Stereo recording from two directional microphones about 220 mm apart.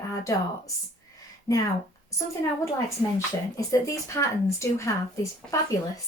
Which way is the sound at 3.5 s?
15° left (ahead or behind).